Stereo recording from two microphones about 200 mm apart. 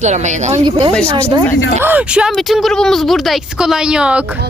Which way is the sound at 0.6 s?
20° right (ahead or behind).